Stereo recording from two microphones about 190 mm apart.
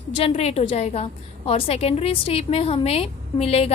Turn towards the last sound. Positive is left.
turn(degrees=30)  # may be behind; listen again after turning